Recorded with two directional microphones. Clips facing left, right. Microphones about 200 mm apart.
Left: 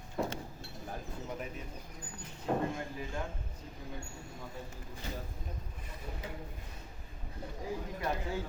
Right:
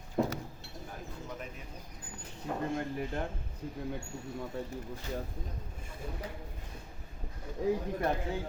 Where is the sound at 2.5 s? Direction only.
50° left (ahead or behind).